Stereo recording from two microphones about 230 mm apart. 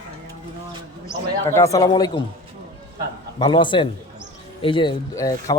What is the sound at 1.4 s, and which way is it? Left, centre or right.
Speech, centre.